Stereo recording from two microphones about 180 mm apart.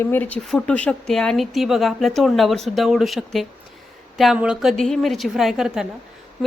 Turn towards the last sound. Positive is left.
turn(degrees=-5)  # may be behind; listen again after turning